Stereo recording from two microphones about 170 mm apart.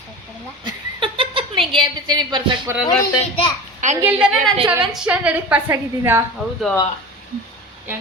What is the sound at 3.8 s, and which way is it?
Speech, 45° right (ahead or behind).